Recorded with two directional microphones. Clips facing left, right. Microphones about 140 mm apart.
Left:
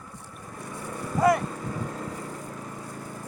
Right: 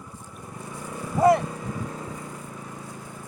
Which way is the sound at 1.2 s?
25° right (ahead or behind).